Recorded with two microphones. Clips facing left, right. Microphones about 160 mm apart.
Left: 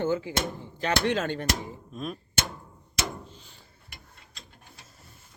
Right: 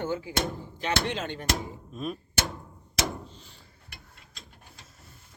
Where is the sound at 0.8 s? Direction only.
45° left (ahead or behind).